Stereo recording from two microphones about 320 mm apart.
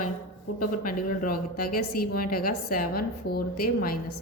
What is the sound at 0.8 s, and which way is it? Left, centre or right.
A woman's voice, left.